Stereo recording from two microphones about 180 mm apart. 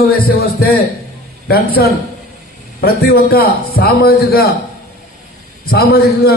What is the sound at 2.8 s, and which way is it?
A man's voice, 60° left (ahead or behind).